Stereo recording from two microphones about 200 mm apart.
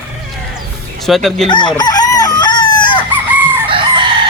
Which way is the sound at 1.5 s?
25° left (ahead or behind).